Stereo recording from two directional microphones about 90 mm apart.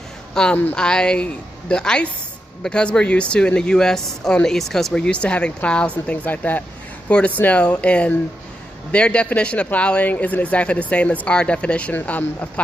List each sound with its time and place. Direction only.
0.3 s speech: 10° left (ahead or behind)